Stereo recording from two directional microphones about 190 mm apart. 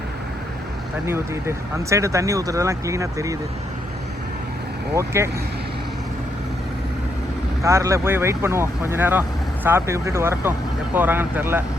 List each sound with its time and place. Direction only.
1.0 s speech: 15° right (ahead or behind)
4.9 s speech: 15° right (ahead or behind)
7.6 s speech: 15° right (ahead or behind)